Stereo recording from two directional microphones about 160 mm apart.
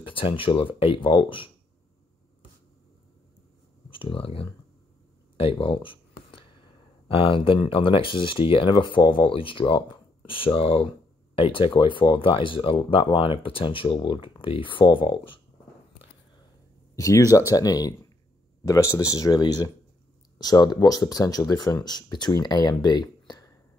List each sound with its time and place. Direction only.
0.0 s speech: 30° left (ahead or behind)
3.9 s speech: 35° left (ahead or behind)
5.4 s a sound: 35° left (ahead or behind)
7.1 s speech: 35° left (ahead or behind)
16.9 s speech: 20° left (ahead or behind)